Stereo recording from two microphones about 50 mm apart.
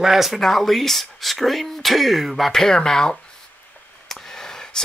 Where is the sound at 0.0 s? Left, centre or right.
Centre.